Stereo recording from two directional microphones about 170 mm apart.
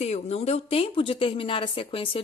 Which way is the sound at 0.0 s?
40° left (ahead or behind).